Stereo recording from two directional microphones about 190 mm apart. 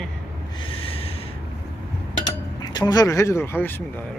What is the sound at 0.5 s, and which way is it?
Snort, 30° left (ahead or behind).